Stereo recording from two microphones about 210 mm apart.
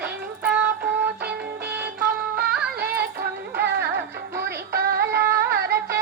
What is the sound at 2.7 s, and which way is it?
Music, 50° right (ahead or behind).